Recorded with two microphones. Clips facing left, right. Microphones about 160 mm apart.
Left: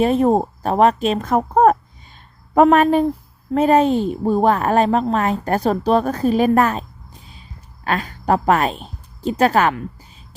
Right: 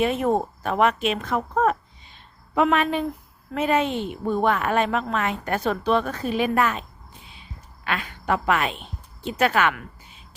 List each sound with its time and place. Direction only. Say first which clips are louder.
0.0 s a woman's voice: left 6 dB; 35° left (ahead or behind)